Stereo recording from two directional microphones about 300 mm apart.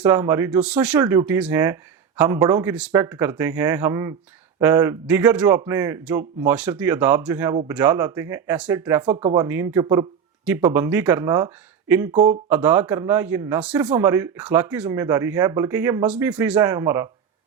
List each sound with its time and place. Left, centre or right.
0.0 s speech: centre